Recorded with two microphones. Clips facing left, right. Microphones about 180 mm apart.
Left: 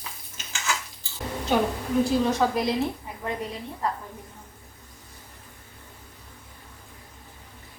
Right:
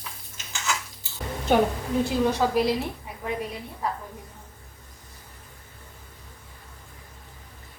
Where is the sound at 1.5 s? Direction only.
55° right (ahead or behind).